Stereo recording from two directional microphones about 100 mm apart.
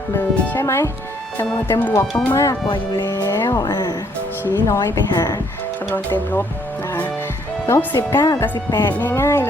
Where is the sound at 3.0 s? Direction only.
35° left (ahead or behind).